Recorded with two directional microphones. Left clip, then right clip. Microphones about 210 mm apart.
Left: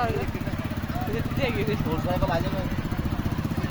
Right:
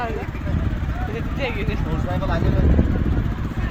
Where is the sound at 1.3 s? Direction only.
50° right (ahead or behind).